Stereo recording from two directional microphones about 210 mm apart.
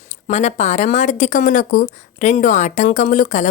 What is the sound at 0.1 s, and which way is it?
A woman's voice, 35° left (ahead or behind).